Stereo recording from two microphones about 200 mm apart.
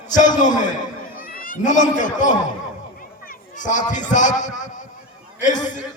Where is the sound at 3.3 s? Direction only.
40° left (ahead or behind).